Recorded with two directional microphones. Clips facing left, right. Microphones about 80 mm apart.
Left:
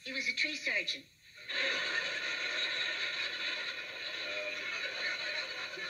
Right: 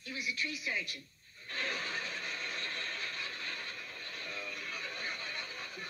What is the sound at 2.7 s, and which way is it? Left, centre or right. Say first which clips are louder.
Vehicle: left 2 dB; centre.